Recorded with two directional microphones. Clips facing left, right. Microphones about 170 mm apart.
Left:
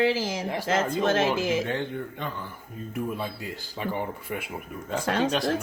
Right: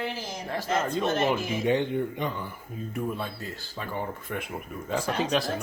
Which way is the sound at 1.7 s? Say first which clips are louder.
Right 5 dB; 15° right (ahead or behind).